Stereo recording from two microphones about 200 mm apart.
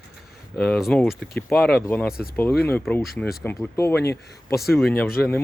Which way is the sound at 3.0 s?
Centre (ahead or behind).